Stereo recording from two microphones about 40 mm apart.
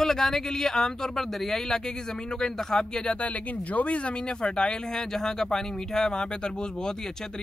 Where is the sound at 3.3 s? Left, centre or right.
Left; by 7.2 s centre.